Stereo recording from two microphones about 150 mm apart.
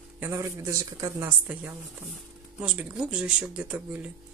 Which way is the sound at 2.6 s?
5° right (ahead or behind).